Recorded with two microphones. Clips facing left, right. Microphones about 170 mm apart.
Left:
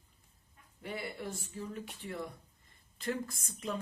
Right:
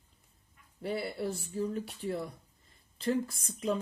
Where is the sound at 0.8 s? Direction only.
35° right (ahead or behind).